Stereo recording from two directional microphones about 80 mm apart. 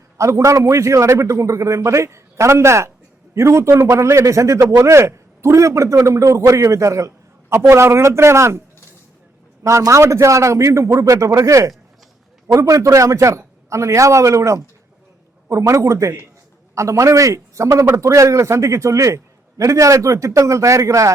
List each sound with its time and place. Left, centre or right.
0.2 s a man's voice: right
9.6 s a man's voice: right